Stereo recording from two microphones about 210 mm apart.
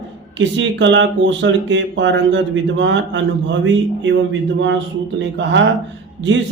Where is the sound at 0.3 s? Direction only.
60° right (ahead or behind).